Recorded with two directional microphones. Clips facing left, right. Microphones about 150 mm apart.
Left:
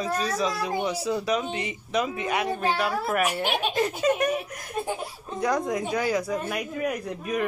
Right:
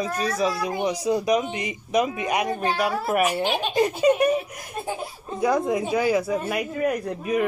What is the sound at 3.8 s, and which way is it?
Speech, 10° right (ahead or behind).